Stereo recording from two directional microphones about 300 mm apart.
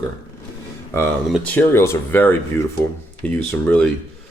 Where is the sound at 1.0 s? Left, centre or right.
Centre.